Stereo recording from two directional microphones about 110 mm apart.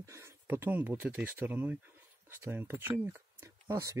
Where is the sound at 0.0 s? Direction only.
25° right (ahead or behind).